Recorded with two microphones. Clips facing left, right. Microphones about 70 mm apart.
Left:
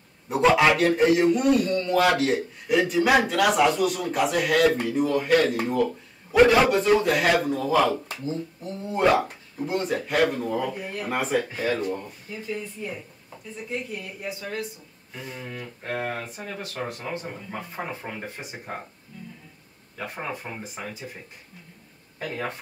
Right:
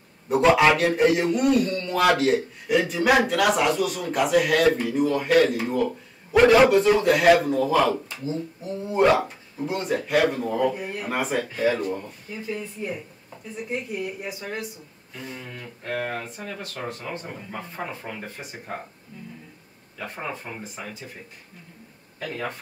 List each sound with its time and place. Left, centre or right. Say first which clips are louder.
0.3 s a man's voice: right 1 dB; centre
13.7 s speech: right 3 dB; centre
15.1 s a man's voice: left 1 dB; centre
20.0 s a man's voice: even; centre